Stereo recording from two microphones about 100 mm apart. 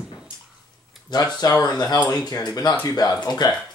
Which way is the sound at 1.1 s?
45° left (ahead or behind).